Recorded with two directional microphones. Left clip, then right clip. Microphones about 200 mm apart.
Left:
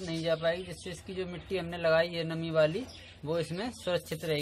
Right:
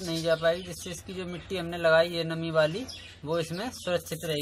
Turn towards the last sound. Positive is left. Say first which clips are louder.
# right 2 dB
turn(degrees=25)  # may be behind; listen again after turning